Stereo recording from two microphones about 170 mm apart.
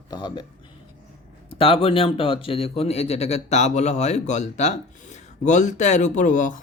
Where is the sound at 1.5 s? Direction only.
35° left (ahead or behind).